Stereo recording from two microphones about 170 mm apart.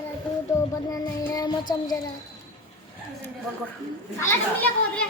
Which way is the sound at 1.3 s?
25° left (ahead or behind).